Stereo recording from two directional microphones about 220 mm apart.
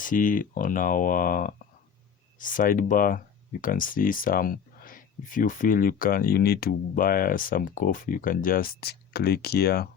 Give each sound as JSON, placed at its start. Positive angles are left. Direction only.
{"t": 0.0, "sound": "speech", "side_deg": 35}